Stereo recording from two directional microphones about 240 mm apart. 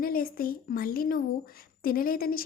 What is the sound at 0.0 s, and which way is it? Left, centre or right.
Speech, left.